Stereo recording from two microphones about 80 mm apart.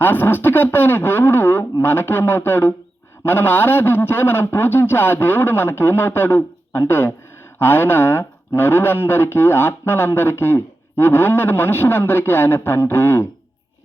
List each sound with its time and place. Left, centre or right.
0.0 s speech: left